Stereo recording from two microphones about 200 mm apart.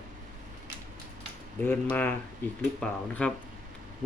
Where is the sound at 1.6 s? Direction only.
10° left (ahead or behind).